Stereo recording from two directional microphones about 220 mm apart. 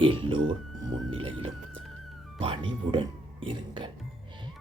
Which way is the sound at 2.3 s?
25° right (ahead or behind).